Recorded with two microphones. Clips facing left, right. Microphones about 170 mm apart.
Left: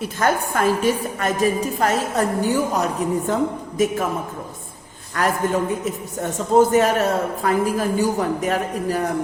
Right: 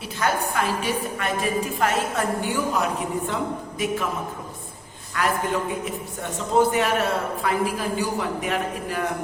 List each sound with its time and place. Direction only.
0.2 s a woman's voice: 45° left (ahead or behind)
5.1 s a man's voice: 45° left (ahead or behind)